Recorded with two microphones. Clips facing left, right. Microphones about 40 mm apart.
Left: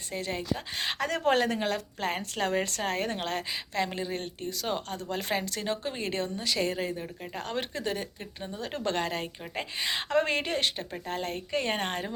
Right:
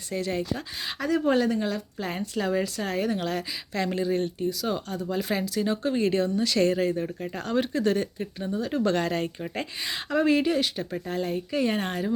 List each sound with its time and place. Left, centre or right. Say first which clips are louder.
0.1 s speech: right 4 dB; left
0.8 s speech: right 5 dB; left
1.2 s a woman's voice: even; left
2.2 s a woman's voice: right 6 dB; left
2.8 s a woman's voice: right 3 dB; left; by 6.9 s centre
7.4 s speech: right 8 dB; left
9.0 s speech: right 5 dB; centre
9.8 s a woman's voice: right 2 dB; left